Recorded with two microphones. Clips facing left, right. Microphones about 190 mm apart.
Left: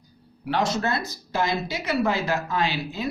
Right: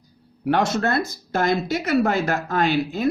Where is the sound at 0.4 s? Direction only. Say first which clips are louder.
Right 4 dB; 50° right (ahead or behind).